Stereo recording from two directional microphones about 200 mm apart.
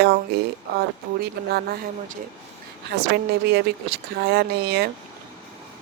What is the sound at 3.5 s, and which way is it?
Speech, 55° right (ahead or behind).